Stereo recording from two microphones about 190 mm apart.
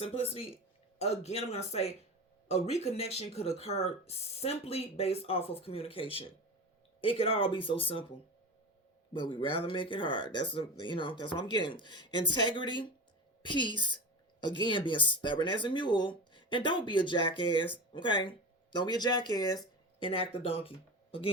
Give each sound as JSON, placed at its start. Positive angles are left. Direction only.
{"t": 0.0, "sound": "speech", "side_deg": 30}
{"t": 9.1, "sound": "speech", "side_deg": 25}